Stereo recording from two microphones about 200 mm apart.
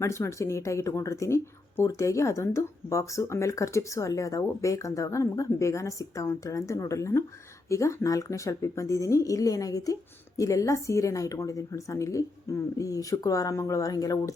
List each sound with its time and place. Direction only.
0.0 s speech: 15° left (ahead or behind)